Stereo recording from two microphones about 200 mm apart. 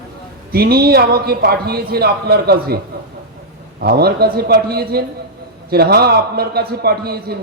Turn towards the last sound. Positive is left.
turn(degrees=-50)  # may be behind; listen again after turning